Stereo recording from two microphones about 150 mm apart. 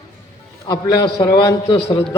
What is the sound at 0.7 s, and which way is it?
A man's voice, 30° left (ahead or behind).